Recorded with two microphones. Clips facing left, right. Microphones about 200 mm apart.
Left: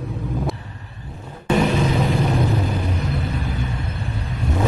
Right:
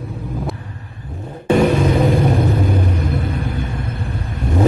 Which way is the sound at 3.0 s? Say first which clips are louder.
Right 4 dB; 50° right (ahead or behind).